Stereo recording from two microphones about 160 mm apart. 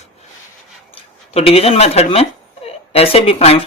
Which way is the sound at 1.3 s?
40° left (ahead or behind).